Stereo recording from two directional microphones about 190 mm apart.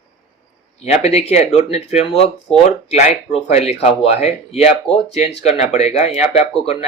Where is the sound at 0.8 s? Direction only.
35° left (ahead or behind).